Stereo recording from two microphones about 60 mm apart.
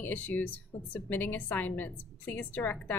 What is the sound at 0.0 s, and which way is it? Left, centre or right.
A woman's voice, left.